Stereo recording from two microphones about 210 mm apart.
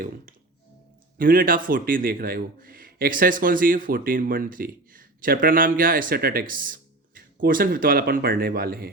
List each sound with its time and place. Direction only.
1.2 s a man's voice: 40° right (ahead or behind)